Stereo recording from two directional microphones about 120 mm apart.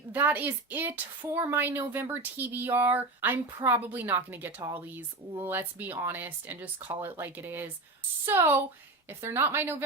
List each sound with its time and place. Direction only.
0.1 s a woman's voice: 15° right (ahead or behind)